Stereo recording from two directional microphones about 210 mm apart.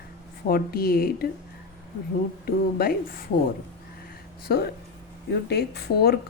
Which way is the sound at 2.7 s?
45° left (ahead or behind).